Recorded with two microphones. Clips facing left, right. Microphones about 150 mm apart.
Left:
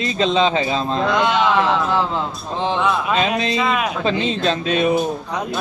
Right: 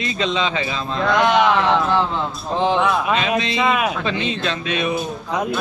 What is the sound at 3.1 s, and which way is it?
Speech, 35° left (ahead or behind).